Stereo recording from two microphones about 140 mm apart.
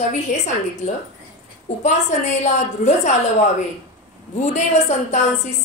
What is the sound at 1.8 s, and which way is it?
A woman's voice, 55° left (ahead or behind).